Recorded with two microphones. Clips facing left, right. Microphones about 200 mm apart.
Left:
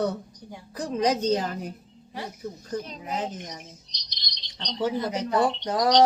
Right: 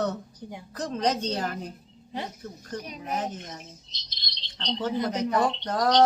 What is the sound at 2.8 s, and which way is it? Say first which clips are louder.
Speech: left 3 dB; 10° right (ahead or behind).